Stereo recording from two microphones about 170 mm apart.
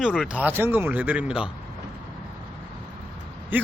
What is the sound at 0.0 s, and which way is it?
Speech, 5° right (ahead or behind).